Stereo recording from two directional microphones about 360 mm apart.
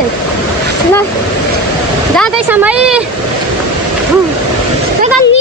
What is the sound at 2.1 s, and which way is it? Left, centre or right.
Speech, centre.